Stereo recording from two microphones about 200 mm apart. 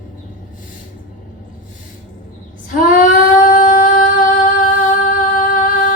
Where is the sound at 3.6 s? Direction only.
40° left (ahead or behind).